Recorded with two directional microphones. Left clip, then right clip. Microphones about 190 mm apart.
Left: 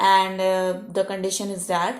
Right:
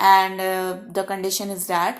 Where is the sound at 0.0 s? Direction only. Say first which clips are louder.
Right 2 dB; 30° right (ahead or behind).